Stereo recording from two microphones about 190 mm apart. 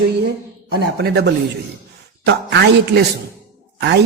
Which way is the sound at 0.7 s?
55° right (ahead or behind).